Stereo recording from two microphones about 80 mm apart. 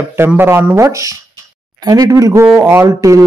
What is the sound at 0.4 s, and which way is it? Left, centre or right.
Speech, right.